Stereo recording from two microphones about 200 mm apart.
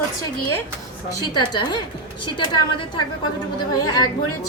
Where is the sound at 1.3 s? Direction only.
20° left (ahead or behind).